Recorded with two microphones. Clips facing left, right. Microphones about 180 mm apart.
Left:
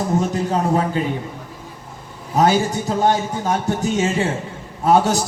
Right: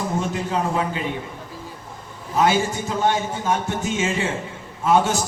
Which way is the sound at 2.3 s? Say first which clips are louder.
Left 3 dB; 40° left (ahead or behind).